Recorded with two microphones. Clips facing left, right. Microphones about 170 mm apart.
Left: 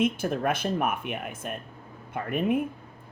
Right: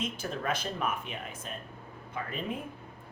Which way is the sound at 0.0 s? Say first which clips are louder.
Left 9 dB; 60° left (ahead or behind).